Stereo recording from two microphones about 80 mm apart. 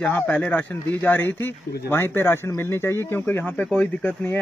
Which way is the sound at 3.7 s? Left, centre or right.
Centre.